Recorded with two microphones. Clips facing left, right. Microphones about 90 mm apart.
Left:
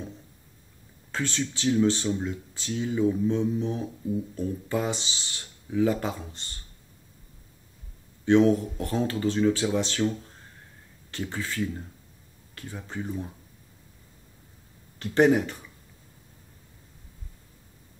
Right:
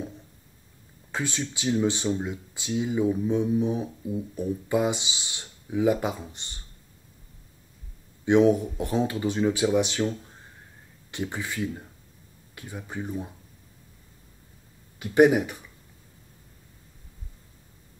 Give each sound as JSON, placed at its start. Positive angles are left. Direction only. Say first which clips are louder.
{"t": 1.1, "sound": "speech", "louder": "left 1 dB", "side_deg": -15}
{"t": 8.3, "sound": "speech", "louder": "right 1 dB", "side_deg": -15}
{"t": 11.1, "sound": "speech", "louder": "right 1 dB", "side_deg": -15}
{"t": 15.0, "sound": "speech", "louder": "right 2 dB", "side_deg": -10}